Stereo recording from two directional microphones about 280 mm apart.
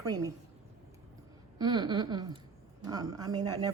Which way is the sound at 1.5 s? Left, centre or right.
Centre.